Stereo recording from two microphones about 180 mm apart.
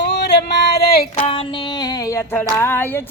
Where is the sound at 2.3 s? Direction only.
10° left (ahead or behind).